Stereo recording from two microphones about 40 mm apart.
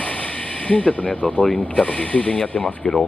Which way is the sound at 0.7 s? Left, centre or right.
Left.